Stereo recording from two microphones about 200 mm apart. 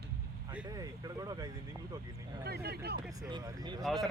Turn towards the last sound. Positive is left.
turn(degrees=0)  # may be behind; listen again after turning